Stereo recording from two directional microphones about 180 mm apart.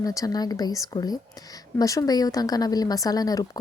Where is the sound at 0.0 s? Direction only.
20° left (ahead or behind).